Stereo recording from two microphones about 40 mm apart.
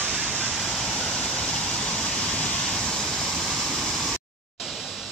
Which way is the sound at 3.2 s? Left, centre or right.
Centre.